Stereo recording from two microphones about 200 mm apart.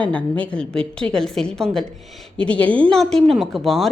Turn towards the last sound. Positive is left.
turn(degrees=0)  # may be behind; listen again after turning